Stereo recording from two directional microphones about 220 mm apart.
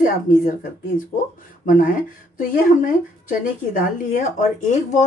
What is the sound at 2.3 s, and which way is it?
Speech, 40° left (ahead or behind).